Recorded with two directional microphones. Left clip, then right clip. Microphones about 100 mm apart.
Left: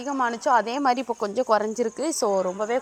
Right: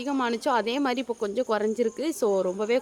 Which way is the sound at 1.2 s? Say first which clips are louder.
Left 4 dB; 5° left (ahead or behind).